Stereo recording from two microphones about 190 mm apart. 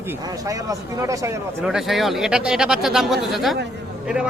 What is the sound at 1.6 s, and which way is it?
Speech, centre (ahead or behind).